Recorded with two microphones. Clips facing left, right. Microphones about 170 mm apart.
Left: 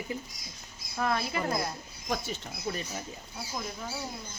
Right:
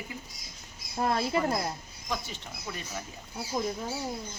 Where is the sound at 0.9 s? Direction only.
30° right (ahead or behind).